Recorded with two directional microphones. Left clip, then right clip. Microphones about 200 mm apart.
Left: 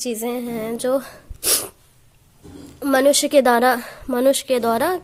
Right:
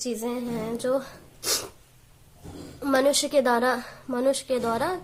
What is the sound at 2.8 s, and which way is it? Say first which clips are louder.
A woman's voice: left 6 dB; 40° left (ahead or behind).